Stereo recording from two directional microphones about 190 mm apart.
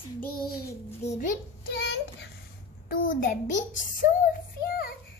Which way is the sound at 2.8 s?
45° left (ahead or behind).